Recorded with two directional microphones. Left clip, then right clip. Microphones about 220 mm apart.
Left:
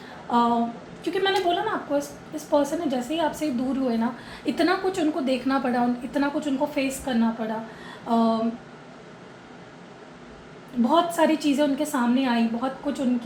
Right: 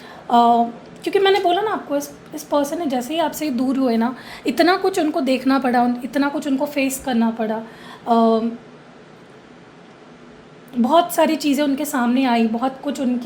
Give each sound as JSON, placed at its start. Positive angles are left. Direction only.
{"t": 0.3, "sound": "a woman's voice", "side_deg": -55}
{"t": 10.8, "sound": "a woman's voice", "side_deg": -55}